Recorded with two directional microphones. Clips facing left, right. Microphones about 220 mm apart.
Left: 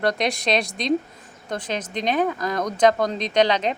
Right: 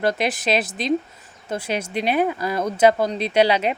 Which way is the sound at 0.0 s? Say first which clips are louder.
Right 1 dB; 5° right (ahead or behind).